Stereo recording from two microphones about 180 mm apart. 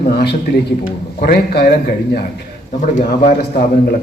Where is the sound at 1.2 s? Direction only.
60° left (ahead or behind).